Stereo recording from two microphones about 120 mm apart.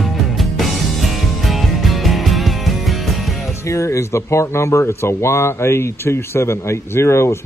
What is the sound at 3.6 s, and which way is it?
Speech, 25° left (ahead or behind).